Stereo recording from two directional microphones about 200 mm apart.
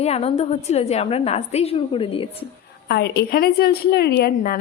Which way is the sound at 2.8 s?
55° left (ahead or behind).